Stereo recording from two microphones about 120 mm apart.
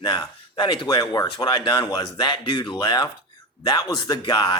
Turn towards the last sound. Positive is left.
turn(degrees=40)  # may be behind; listen again after turning